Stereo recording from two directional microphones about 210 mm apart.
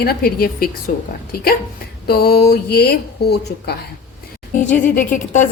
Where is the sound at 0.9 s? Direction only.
35° left (ahead or behind).